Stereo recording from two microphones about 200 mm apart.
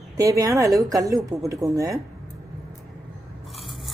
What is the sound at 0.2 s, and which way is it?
Speech, 15° right (ahead or behind).